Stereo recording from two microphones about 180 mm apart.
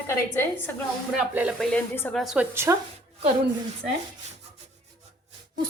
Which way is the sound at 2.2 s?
Centre (ahead or behind).